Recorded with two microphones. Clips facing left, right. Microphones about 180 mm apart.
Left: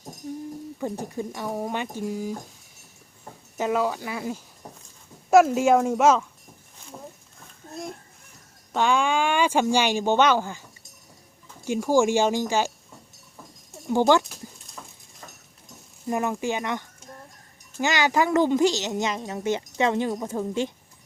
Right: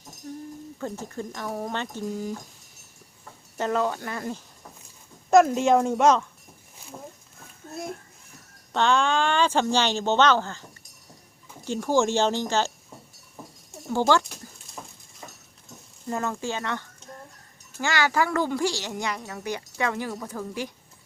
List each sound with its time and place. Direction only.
0.8 s speech: 15° left (ahead or behind)
3.6 s speech: 5° left (ahead or behind)
8.7 s speech: 10° left (ahead or behind)
14.1 s speech: 15° left (ahead or behind)
14.8 s a sound: 15° right (ahead or behind)
16.0 s a woman's voice: 15° left (ahead or behind)